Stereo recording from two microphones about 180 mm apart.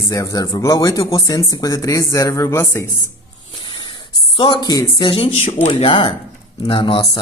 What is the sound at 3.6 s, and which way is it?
Speech, 30° left (ahead or behind).